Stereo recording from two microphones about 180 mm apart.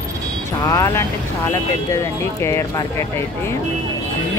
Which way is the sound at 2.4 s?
15° left (ahead or behind).